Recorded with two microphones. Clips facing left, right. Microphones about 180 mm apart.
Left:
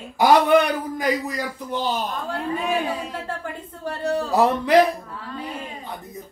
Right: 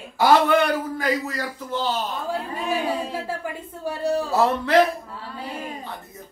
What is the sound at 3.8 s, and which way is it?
Speech, 10° right (ahead or behind).